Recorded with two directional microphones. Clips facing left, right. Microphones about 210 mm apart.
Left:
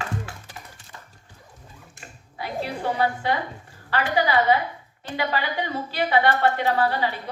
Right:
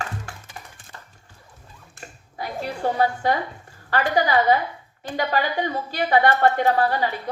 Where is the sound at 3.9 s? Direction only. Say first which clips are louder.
Right 2 dB; 45° right (ahead or behind).